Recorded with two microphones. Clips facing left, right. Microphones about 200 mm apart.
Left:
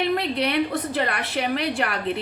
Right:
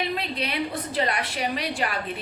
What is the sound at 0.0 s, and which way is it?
A woman's voice, 65° left (ahead or behind).